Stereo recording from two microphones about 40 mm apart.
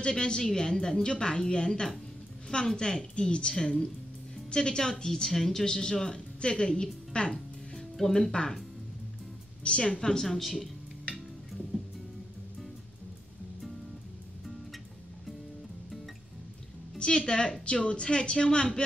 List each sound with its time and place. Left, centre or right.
0.1 s a woman's voice: centre
9.6 s a woman's voice: left
10.4 s speech: centre
17.0 s a woman's voice: left